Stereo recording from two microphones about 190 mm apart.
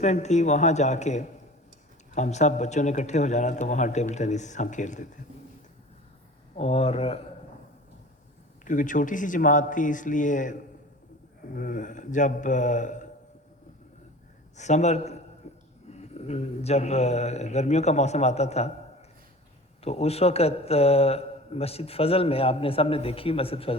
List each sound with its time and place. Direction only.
0.0 s a man's voice: 35° left (ahead or behind)
6.6 s a man's voice: 30° left (ahead or behind)
8.6 s a man's voice: 45° left (ahead or behind)
14.5 s a man's voice: 40° left (ahead or behind)
15.4 s a sound: 35° left (ahead or behind)
15.9 s a man's voice: 35° left (ahead or behind)
19.8 s a man's voice: 35° left (ahead or behind)